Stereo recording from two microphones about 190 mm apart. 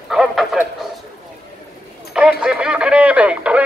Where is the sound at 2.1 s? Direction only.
5° right (ahead or behind).